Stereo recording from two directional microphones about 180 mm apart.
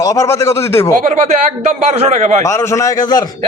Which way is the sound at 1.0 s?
40° right (ahead or behind).